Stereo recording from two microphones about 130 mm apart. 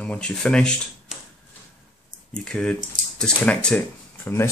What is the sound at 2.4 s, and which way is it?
Speech, 5° left (ahead or behind).